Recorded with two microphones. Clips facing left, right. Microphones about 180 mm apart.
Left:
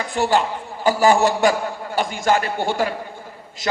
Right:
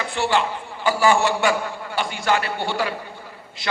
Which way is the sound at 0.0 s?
40° left (ahead or behind).